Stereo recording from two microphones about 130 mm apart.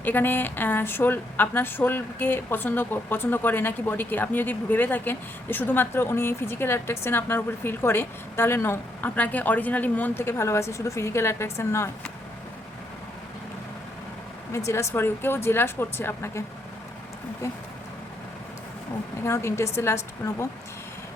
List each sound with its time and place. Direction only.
0.0 s a woman's voice: 15° left (ahead or behind)
14.5 s speech: 20° left (ahead or behind)
19.2 s speech: 20° left (ahead or behind)